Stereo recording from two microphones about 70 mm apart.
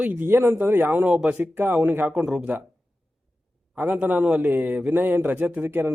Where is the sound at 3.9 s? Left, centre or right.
Centre.